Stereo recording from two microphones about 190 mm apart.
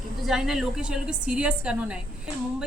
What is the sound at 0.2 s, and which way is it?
A woman's voice, centre (ahead or behind).